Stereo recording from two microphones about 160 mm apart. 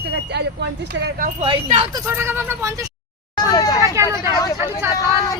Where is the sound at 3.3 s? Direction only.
25° left (ahead or behind).